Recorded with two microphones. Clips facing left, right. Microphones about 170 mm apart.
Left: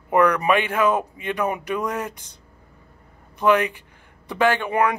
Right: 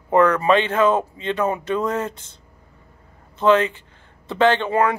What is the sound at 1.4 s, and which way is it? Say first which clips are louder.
Speech: right 3 dB; 15° left (ahead or behind).